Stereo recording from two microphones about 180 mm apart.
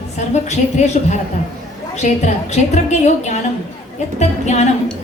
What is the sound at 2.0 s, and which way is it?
A woman's voice, 40° left (ahead or behind).